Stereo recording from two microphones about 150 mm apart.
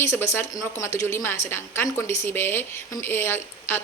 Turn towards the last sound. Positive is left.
turn(degrees=15)  # may be behind; listen again after turning